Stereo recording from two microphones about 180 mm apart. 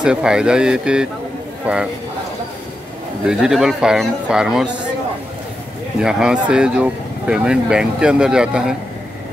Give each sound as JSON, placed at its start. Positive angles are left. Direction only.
{"t": 0.0, "sound": "speech", "side_deg": -5}
{"t": 3.3, "sound": "speech", "side_deg": -5}
{"t": 5.9, "sound": "speech", "side_deg": -5}